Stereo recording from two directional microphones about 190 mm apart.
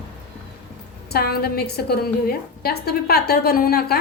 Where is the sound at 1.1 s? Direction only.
55° left (ahead or behind).